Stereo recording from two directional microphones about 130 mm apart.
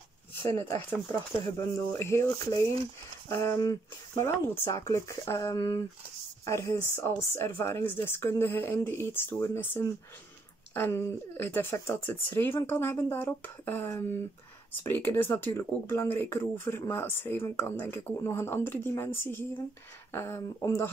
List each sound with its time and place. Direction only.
0.6 s speech: 15° left (ahead or behind)
20.1 s speech: 20° left (ahead or behind)